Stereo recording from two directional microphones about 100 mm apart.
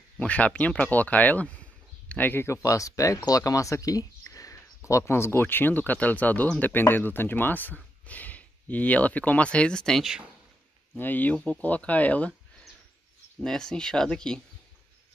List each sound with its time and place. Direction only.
0.2 s speech: 15° left (ahead or behind)
11.0 s speech: 20° left (ahead or behind)
13.4 s speech: 5° left (ahead or behind)